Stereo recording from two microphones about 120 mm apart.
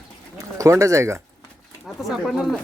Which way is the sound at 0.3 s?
25° right (ahead or behind).